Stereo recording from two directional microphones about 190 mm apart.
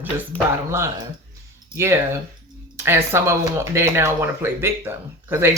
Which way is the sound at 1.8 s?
15° right (ahead or behind).